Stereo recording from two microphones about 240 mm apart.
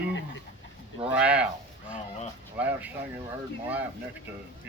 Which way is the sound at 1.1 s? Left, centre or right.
Centre.